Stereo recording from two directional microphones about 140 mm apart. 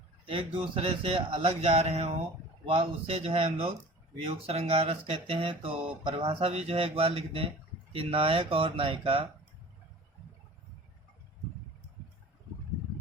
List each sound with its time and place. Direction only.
0.3 s speech: 40° right (ahead or behind)